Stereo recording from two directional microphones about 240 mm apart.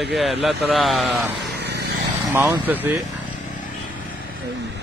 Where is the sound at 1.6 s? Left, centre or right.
Right.